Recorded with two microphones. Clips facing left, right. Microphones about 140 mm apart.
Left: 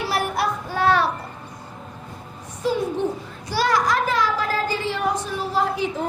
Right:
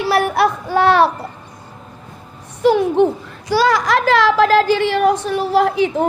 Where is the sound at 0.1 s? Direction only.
70° right (ahead or behind).